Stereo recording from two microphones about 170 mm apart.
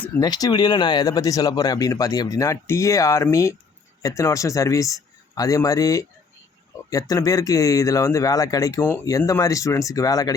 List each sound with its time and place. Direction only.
0.2 s speech: 20° left (ahead or behind)